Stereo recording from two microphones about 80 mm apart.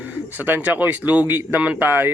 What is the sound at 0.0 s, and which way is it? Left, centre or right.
Speech, right.